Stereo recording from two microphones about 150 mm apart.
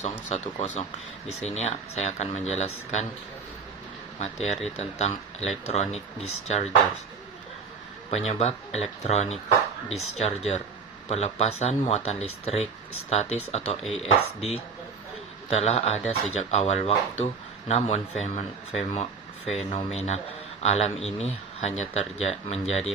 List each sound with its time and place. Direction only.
0.0 s speech: 55° left (ahead or behind)
4.2 s speech: 45° left (ahead or behind)
8.1 s speech: 45° left (ahead or behind)
15.4 s speech: 45° left (ahead or behind)